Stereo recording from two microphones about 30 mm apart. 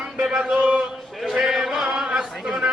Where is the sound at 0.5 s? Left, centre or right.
Right.